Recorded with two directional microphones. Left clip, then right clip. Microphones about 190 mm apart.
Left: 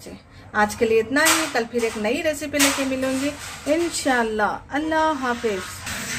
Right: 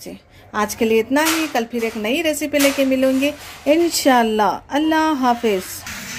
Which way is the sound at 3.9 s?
30° right (ahead or behind).